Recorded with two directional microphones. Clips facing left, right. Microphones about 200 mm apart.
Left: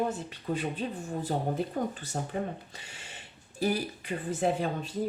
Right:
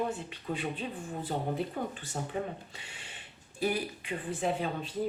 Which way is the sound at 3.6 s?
40° left (ahead or behind).